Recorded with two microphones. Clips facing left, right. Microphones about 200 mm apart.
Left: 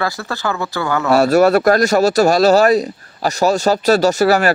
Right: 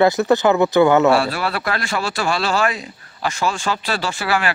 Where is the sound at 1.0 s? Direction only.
45° left (ahead or behind).